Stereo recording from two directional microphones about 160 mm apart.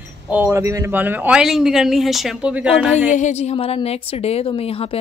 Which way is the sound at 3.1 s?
50° left (ahead or behind).